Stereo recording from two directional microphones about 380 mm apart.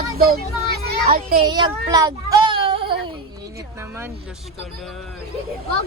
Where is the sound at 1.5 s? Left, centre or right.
Centre.